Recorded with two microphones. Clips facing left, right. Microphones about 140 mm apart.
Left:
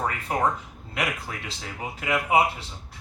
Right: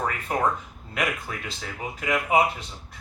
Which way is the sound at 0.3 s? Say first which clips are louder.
Even; 20° left (ahead or behind).